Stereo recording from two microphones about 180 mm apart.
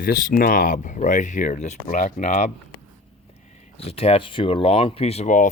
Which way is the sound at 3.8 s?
35° left (ahead or behind).